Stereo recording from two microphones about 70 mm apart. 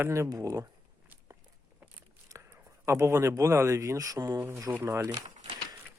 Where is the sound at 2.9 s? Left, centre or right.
Right.